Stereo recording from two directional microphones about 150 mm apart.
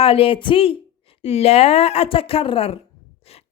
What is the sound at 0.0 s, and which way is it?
A woman's voice, 40° left (ahead or behind).